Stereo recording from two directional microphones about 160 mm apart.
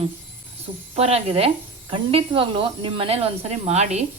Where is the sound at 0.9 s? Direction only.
40° right (ahead or behind).